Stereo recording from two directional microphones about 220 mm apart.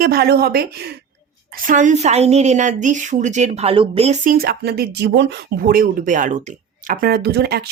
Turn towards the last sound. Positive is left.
turn(degrees=-45)  # may be behind; listen again after turning